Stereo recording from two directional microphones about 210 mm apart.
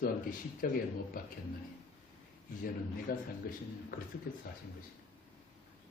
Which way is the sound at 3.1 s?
45° left (ahead or behind).